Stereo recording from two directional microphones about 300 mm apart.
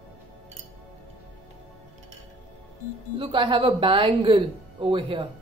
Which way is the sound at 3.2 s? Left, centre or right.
Centre.